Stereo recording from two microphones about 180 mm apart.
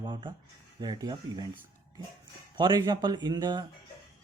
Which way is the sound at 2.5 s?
25° right (ahead or behind).